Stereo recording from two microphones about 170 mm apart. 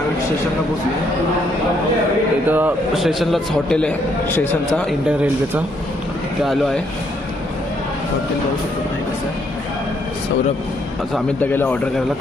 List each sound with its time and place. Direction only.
2.5 s a man's voice: 10° right (ahead or behind); by 4.4 s 10° left (ahead or behind)
4.9 s a man's voice: 5° right (ahead or behind)
11.3 s a man's voice: 10° left (ahead or behind)